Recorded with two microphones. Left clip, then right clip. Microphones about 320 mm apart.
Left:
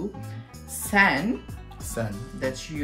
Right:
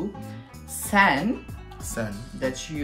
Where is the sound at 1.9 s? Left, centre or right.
Centre.